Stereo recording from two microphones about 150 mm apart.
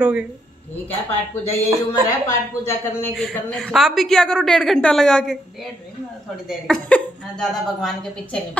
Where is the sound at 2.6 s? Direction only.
15° left (ahead or behind).